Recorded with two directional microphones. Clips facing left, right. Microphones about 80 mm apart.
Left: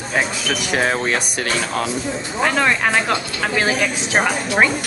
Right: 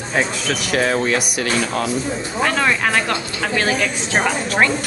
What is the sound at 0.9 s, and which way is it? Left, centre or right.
Speech, left.